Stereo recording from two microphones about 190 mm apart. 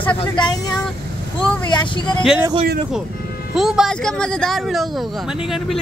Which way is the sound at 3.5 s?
Centre (ahead or behind).